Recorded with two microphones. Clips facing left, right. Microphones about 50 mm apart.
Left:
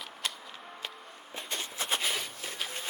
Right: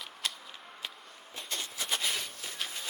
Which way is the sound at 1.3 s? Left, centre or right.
Centre.